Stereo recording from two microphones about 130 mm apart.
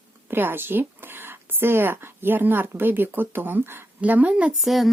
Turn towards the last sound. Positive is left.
turn(degrees=0)  # may be behind; listen again after turning